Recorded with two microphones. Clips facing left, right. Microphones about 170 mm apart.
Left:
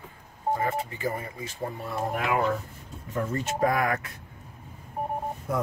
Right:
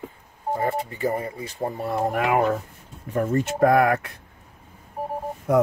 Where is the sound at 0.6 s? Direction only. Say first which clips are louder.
Right 4 dB; 35° right (ahead or behind).